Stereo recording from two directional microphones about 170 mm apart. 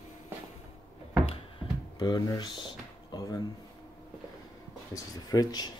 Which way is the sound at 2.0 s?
25° left (ahead or behind).